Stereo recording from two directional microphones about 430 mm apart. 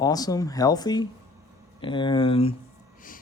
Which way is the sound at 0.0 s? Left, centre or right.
Centre.